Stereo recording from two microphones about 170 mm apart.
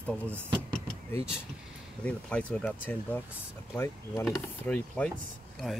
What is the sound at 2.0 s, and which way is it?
Speech, 5° left (ahead or behind).